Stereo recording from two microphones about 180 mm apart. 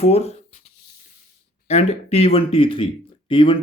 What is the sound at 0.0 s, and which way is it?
Speech, 35° left (ahead or behind).